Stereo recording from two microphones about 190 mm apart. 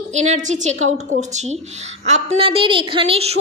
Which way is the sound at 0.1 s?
40° right (ahead or behind).